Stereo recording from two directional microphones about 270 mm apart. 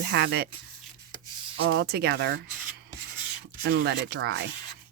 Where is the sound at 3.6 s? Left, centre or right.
Right.